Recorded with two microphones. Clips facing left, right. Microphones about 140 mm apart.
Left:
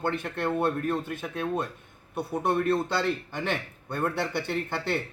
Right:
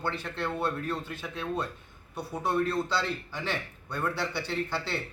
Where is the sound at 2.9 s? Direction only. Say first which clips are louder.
Left 3 dB; 55° left (ahead or behind).